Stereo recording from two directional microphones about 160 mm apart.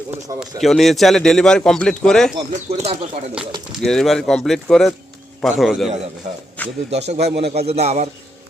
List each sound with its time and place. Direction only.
0.3 s a man's voice: centre (ahead or behind)
2.6 s a man's voice: 40° right (ahead or behind)
3.7 s a man's voice: centre (ahead or behind)
6.6 s a sound: 10° left (ahead or behind)
7.2 s speech: 90° right
7.6 s a man's voice: 40° right (ahead or behind)